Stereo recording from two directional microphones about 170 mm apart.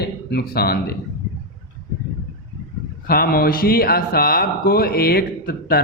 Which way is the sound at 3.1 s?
60° left (ahead or behind).